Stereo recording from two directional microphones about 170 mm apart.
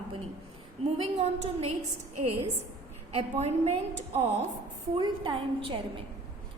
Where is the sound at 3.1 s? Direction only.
40° right (ahead or behind).